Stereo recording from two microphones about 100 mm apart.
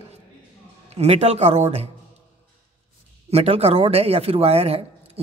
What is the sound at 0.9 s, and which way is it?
Speech, 90° right.